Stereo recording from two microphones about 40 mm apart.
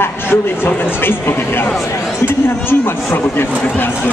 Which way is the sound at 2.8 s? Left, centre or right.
Left.